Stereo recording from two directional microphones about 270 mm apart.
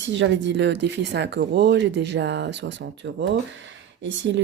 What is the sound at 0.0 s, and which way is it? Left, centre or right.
Speech, right.